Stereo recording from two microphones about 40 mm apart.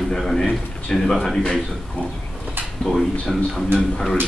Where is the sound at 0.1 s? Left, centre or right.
Centre.